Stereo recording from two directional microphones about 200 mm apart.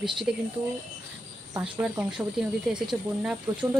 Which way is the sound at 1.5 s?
5° right (ahead or behind).